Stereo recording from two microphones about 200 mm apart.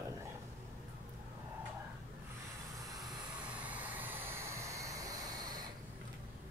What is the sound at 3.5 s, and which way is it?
Vehicle, 5° right (ahead or behind).